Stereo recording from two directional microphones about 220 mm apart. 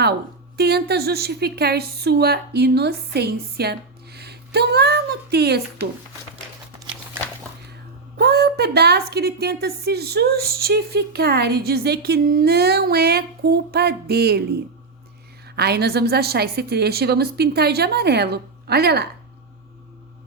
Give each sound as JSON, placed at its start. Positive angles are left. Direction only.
{"t": 0.5, "sound": "a woman's voice", "side_deg": -45}
{"t": 8.1, "sound": "a woman's voice", "side_deg": -45}
{"t": 15.5, "sound": "a woman's voice", "side_deg": -45}